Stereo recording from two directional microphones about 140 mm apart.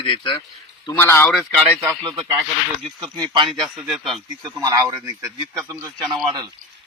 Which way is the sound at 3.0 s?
35° right (ahead or behind).